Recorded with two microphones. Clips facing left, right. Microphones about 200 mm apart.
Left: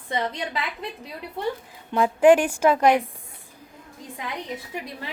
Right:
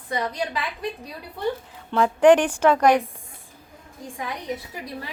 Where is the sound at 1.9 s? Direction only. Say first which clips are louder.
Right 1 dB; 5° left (ahead or behind).